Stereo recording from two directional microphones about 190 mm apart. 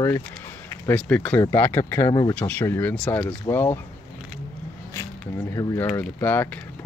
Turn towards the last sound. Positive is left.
turn(degrees=10)  # may be behind; listen again after turning